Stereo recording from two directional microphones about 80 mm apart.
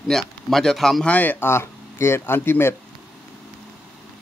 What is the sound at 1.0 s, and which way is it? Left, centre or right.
Speech, centre.